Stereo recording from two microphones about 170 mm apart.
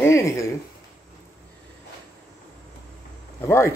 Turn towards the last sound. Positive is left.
turn(degrees=15)  # may be behind; listen again after turning